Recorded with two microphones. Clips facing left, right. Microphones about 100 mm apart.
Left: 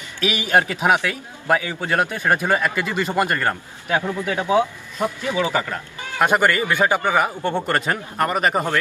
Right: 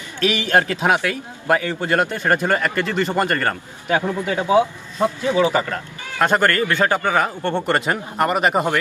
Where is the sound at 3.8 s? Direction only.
20° right (ahead or behind).